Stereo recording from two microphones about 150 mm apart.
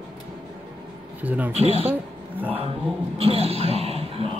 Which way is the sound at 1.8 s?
10° right (ahead or behind).